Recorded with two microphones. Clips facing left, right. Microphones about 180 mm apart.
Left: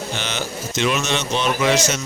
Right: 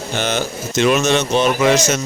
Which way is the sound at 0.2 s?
50° right (ahead or behind).